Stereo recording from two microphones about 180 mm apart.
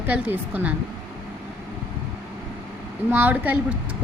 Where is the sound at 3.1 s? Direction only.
10° right (ahead or behind).